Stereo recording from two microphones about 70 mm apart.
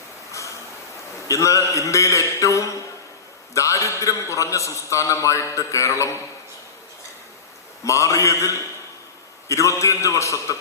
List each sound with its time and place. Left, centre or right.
0.3 s a sound: left
1.3 s a man's voice: left
7.9 s a man's voice: left